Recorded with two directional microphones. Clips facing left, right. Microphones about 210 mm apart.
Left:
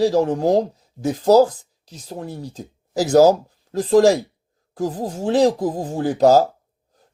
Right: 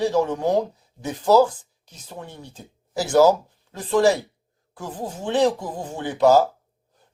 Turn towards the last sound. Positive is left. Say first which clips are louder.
# left 3 dB
turn(degrees=40)  # may be behind; listen again after turning